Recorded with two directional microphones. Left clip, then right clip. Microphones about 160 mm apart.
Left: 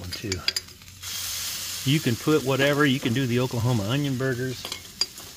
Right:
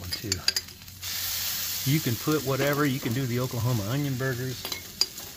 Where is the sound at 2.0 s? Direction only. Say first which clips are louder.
Left 7 dB; 60° left (ahead or behind); by 3.9 s 45° left (ahead or behind).